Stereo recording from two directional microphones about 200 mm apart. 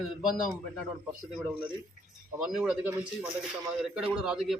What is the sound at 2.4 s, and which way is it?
Speech, 5° right (ahead or behind).